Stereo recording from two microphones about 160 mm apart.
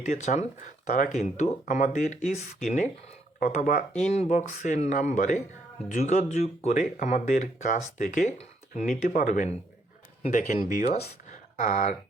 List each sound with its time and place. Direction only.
0.0 s speech: 50° left (ahead or behind)
10.7 s speech: 45° left (ahead or behind)